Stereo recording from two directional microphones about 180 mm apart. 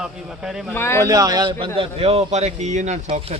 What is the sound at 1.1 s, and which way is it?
A man's voice, 20° right (ahead or behind).